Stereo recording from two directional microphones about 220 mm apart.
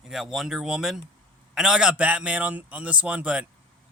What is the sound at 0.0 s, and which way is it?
A man's voice, centre (ahead or behind).